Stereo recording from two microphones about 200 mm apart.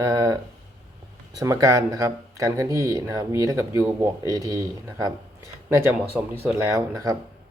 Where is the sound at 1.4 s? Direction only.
15° right (ahead or behind).